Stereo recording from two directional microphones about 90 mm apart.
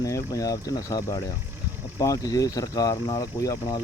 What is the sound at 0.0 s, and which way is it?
Speech, 35° left (ahead or behind).